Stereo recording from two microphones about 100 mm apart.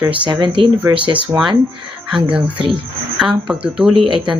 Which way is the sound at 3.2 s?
5° right (ahead or behind).